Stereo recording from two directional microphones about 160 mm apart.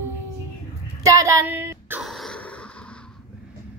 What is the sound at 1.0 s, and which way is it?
Female singing, 20° right (ahead or behind).